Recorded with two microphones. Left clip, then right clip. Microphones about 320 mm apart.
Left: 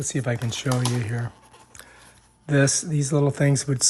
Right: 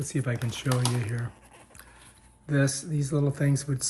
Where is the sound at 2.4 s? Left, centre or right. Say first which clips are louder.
Left 7 dB; left.